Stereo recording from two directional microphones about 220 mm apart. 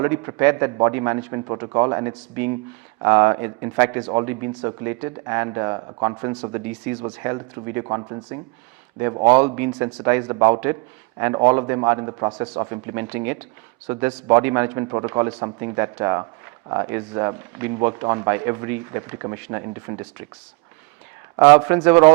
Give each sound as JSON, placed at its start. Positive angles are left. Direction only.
{"t": 0.0, "sound": "speech", "side_deg": -15}
{"t": 9.6, "sound": "speech", "side_deg": -20}
{"t": 21.3, "sound": "speech", "side_deg": -15}